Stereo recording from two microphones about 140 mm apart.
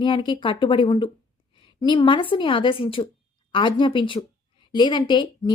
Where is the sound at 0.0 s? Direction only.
35° left (ahead or behind).